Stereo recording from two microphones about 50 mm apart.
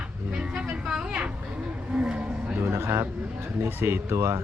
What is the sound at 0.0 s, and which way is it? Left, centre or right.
Vehicle, right.